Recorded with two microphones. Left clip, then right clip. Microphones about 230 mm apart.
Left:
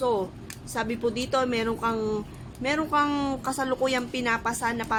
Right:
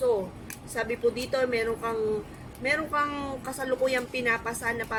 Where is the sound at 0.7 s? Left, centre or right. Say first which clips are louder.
Right 1 dB; left.